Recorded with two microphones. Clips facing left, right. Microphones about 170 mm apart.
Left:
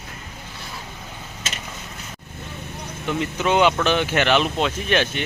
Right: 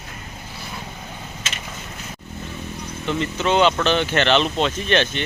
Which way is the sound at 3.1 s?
10° left (ahead or behind).